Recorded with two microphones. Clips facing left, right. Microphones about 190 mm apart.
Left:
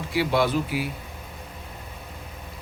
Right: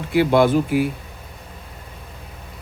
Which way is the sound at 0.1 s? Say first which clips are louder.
Right 7 dB; 55° right (ahead or behind).